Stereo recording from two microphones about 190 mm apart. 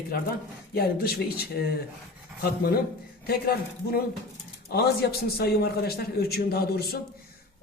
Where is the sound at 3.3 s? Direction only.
55° left (ahead or behind).